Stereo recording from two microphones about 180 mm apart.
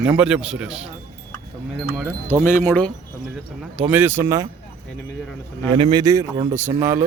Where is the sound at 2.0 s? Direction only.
5° right (ahead or behind).